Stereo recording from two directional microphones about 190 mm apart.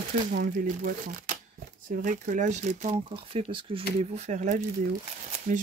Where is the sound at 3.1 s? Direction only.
30° right (ahead or behind).